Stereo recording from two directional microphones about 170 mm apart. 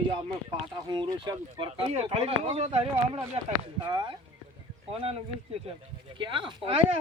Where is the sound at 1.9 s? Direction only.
35° right (ahead or behind).